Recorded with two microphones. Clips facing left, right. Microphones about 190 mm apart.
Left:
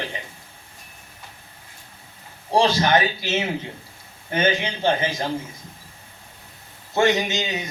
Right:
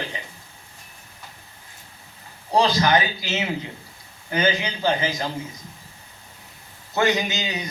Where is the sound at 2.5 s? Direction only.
25° left (ahead or behind).